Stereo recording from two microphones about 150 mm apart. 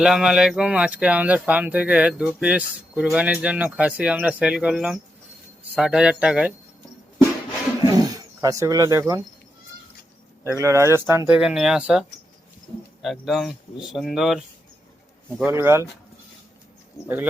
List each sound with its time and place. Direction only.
0.0 s speech: 5° right (ahead or behind)
7.9 s wild animals: 25° right (ahead or behind)
10.4 s speech: 20° right (ahead or behind)
11.3 s speech: 5° right (ahead or behind)
15.4 s speech: 15° right (ahead or behind)